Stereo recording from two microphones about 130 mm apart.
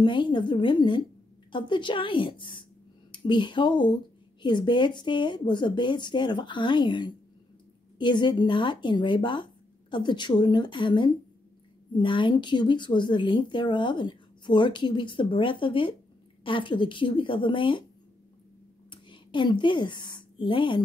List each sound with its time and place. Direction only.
0.0 s speech: 35° left (ahead or behind)
18.9 s a woman's voice: 35° left (ahead or behind)